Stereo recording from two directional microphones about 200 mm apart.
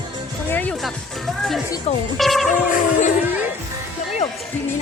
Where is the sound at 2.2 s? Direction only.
Centre (ahead or behind).